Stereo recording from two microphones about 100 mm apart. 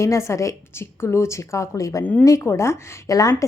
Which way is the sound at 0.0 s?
30° left (ahead or behind).